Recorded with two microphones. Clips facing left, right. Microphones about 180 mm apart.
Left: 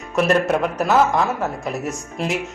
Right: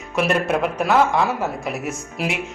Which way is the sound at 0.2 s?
Centre (ahead or behind).